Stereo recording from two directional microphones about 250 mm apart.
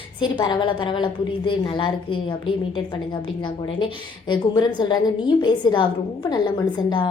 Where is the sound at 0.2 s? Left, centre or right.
Centre.